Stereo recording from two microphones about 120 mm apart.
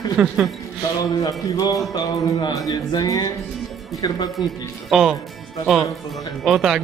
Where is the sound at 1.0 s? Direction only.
30° left (ahead or behind).